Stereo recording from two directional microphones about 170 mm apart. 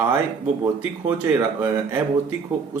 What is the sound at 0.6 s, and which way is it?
Speech, 15° right (ahead or behind).